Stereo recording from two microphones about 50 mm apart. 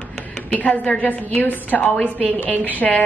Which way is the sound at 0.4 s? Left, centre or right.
Left.